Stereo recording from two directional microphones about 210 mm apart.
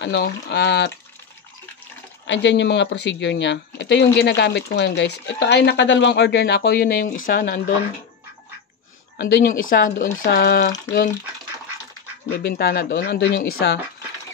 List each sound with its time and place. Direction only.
0.0 s speech: 55° left (ahead or behind)
2.2 s speech: 60° left (ahead or behind); by 7.7 s 40° left (ahead or behind)
9.3 s speech: 40° left (ahead or behind)
12.4 s speech: 50° left (ahead or behind)